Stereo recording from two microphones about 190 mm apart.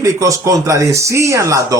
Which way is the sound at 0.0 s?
15° right (ahead or behind).